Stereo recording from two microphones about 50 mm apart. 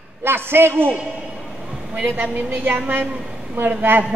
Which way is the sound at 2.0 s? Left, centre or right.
Right.